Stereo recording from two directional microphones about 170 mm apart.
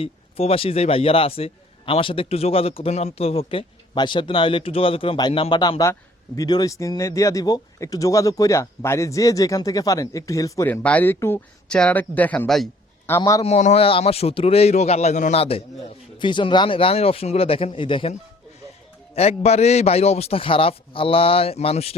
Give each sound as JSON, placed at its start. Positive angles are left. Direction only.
{"t": 0.0, "sound": "a man's voice", "side_deg": 35}
{"t": 13.1, "sound": "a man's voice", "side_deg": 15}
{"t": 13.4, "sound": "a man's voice", "side_deg": 40}
{"t": 19.1, "sound": "a man's voice", "side_deg": 40}